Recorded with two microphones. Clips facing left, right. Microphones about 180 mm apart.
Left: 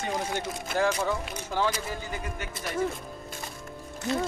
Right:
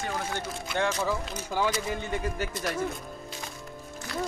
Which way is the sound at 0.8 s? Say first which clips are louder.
Left 1 dB; 10° left (ahead or behind).